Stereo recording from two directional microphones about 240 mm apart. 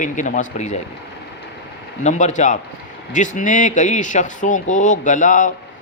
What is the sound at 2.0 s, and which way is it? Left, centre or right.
A man's voice, left.